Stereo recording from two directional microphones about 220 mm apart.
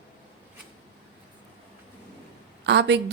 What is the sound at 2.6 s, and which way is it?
Speech, 55° right (ahead or behind).